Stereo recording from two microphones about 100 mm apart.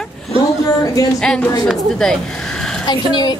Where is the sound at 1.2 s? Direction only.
5° left (ahead or behind).